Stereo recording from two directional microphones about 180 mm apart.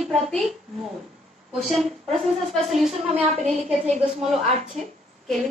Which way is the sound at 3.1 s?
35° right (ahead or behind).